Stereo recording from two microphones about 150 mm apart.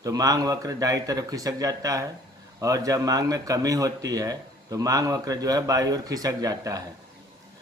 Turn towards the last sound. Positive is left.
turn(degrees=-25)  # may be behind; listen again after turning